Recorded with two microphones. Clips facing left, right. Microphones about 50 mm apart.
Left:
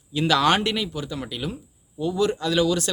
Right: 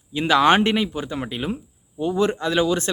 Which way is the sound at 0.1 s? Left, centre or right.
Right.